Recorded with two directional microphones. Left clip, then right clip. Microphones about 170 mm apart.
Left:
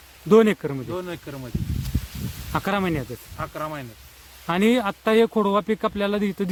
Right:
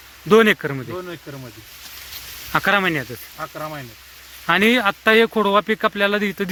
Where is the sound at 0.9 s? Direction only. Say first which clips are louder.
Even; 25° left (ahead or behind).